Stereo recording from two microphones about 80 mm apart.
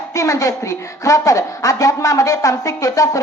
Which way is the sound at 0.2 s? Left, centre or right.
Left.